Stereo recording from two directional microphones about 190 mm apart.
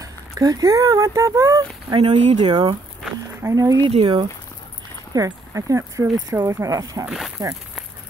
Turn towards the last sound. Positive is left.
turn(degrees=0)  # may be behind; listen again after turning